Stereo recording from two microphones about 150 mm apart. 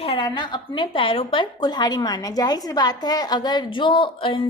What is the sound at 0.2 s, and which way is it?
A woman's voice, 30° left (ahead or behind).